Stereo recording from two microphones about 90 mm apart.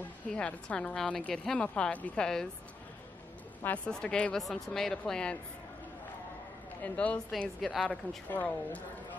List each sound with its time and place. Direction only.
0.3 s a woman's voice: 10° left (ahead or behind)
3.6 s a woman's voice: 15° left (ahead or behind)
6.8 s a woman's voice: 15° left (ahead or behind)
8.3 s a woman's voice: 20° left (ahead or behind)